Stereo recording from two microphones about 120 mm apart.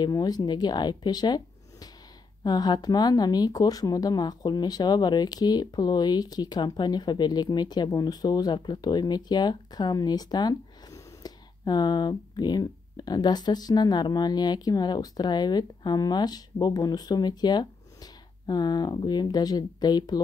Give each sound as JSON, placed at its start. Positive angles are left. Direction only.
{"t": 0.0, "sound": "speech", "side_deg": 35}